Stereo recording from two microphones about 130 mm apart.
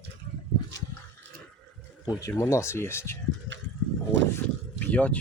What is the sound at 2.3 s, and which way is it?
Speech, 20° left (ahead or behind).